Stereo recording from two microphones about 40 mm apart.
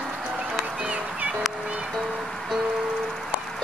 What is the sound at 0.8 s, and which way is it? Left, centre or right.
Music, right.